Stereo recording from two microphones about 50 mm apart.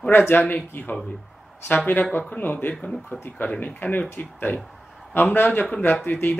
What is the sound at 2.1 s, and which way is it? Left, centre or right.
Speech, left.